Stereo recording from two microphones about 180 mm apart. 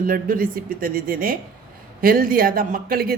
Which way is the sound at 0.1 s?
50° right (ahead or behind).